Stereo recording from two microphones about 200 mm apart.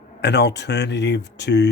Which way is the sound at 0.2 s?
60° left (ahead or behind).